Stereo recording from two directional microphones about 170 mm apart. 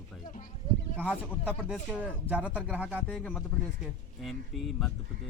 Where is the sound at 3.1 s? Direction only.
10° left (ahead or behind).